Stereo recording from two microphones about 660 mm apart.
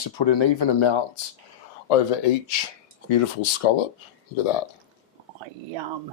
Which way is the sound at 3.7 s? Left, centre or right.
Left.